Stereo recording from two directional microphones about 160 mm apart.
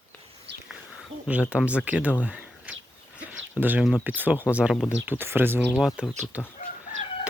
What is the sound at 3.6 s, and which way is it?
Speech, 10° right (ahead or behind).